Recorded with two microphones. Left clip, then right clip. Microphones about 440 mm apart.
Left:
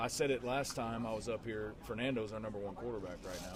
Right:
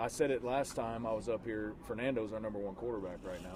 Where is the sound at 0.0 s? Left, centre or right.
Left.